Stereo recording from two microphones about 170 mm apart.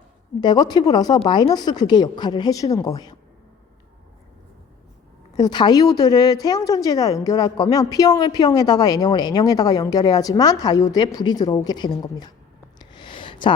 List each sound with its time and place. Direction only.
0.4 s a woman's voice: 25° left (ahead or behind)
5.4 s a woman's voice: 25° left (ahead or behind)
12.8 s a sound: 25° left (ahead or behind)